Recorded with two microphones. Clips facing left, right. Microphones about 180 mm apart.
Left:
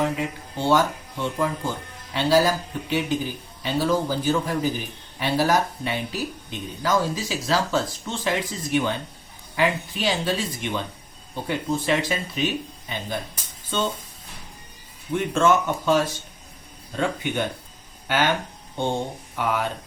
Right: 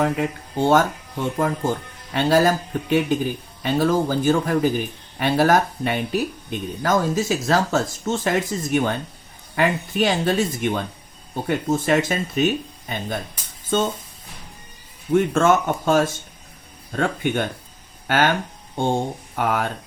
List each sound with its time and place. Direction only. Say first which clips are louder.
0.0 s speech: right 3 dB; 50° right (ahead or behind)
15.1 s speech: right 3 dB; 50° right (ahead or behind)
19.4 s speech: right 2 dB; 50° right (ahead or behind)